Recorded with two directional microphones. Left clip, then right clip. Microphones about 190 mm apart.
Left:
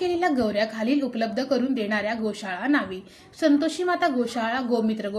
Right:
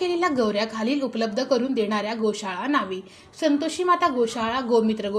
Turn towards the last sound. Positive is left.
turn(degrees=-15)  # may be behind; listen again after turning